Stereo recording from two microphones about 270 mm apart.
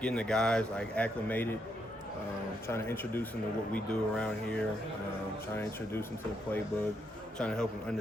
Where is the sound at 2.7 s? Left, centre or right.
Centre.